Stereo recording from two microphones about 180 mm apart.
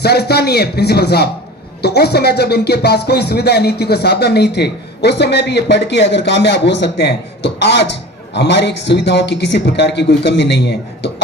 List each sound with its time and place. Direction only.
0.0 s a man's voice: 65° left (ahead or behind)